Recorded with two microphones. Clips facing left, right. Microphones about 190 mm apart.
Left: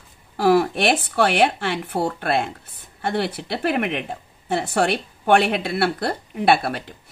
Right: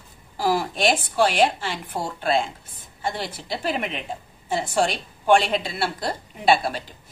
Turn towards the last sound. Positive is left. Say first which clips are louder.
# left 2 dB
turn(degrees=60)  # may be behind; listen again after turning